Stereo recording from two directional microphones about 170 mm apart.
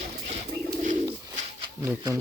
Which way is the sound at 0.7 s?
50° right (ahead or behind).